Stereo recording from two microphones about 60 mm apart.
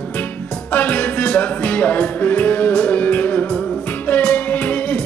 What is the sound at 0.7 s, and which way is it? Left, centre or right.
Music, left.